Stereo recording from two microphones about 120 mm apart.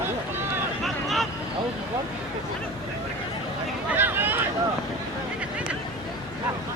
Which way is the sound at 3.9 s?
15° right (ahead or behind).